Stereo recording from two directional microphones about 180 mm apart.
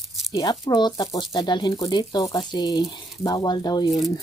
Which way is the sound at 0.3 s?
20° left (ahead or behind).